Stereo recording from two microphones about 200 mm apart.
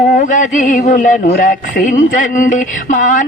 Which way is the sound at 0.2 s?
40° left (ahead or behind).